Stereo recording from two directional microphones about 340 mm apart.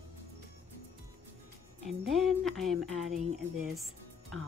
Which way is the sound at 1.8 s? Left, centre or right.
Centre.